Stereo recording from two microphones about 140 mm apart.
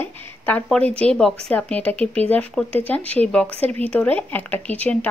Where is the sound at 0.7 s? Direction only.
10° left (ahead or behind).